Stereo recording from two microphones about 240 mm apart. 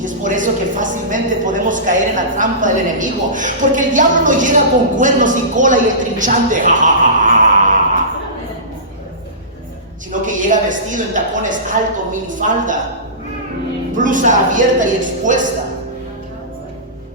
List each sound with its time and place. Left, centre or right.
0.0 s a woman's voice: right
10.1 s a woman's voice: right
13.9 s a woman's voice: right